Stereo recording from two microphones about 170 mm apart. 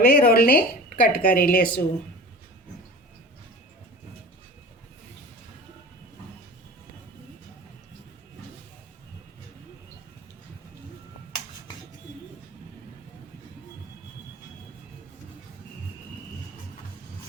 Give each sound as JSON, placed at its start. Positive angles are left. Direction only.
{"t": 0.0, "sound": "a woman's voice", "side_deg": 60}